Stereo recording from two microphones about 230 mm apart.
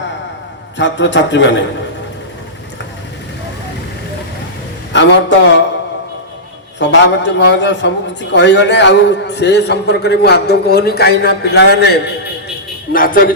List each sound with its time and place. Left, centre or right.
0.8 s a man's voice: left
4.9 s a man's voice: left
6.7 s a man's voice: left